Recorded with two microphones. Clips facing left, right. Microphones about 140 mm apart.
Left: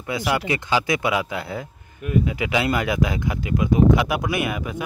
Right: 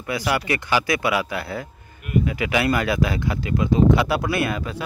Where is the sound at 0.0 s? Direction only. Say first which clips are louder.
Even; 20° left (ahead or behind).